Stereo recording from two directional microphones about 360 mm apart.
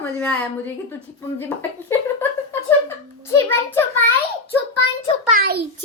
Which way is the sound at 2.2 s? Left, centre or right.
Centre.